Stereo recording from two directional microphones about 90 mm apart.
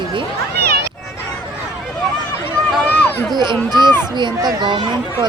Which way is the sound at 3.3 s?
50° right (ahead or behind).